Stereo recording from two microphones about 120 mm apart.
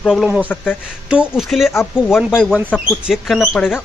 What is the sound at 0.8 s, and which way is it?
A man's voice, 10° right (ahead or behind).